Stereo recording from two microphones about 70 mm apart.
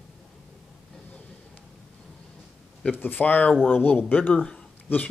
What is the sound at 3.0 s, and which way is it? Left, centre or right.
Speech, left.